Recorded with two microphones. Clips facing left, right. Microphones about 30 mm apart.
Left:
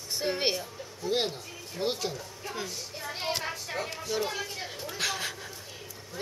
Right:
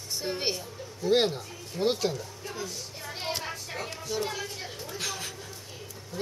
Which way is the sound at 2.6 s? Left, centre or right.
Centre.